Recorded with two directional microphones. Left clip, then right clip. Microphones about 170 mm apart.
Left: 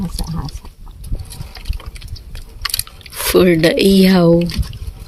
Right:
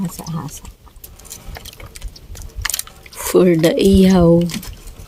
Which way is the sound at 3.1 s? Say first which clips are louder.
Left 1 dB; centre (ahead or behind).